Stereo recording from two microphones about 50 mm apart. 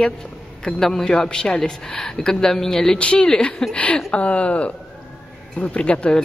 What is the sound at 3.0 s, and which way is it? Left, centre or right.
Speech, left.